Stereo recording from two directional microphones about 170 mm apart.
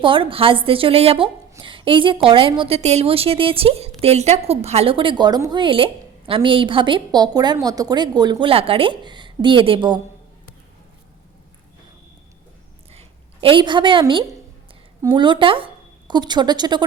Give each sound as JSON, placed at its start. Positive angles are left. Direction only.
{"t": 0.0, "sound": "a woman's voice", "side_deg": -30}
{"t": 12.9, "sound": "a sound", "side_deg": -35}
{"t": 15.0, "sound": "speech", "side_deg": -30}